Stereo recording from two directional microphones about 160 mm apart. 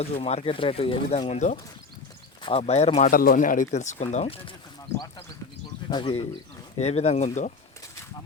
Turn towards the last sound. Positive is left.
turn(degrees=45)  # may be behind; listen again after turning